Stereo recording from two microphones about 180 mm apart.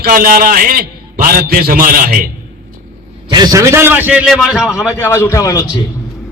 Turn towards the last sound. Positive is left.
turn(degrees=20)  # may be behind; listen again after turning